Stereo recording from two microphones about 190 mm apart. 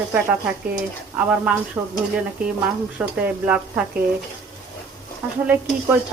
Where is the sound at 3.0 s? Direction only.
5° right (ahead or behind).